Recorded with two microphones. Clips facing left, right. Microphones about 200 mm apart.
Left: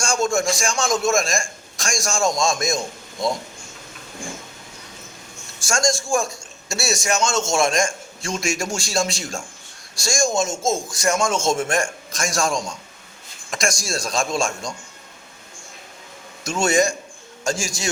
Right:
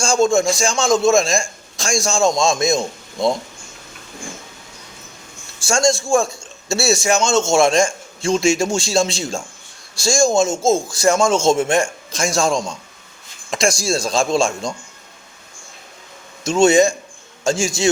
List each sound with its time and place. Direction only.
0.0 s a man's voice: 25° right (ahead or behind)
5.6 s a man's voice: 25° right (ahead or behind)
16.4 s a man's voice: 25° right (ahead or behind)